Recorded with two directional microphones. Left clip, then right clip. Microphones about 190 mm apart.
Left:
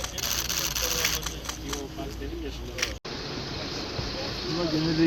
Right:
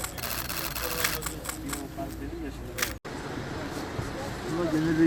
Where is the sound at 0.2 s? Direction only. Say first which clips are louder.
Left 7 dB; 60° right (ahead or behind).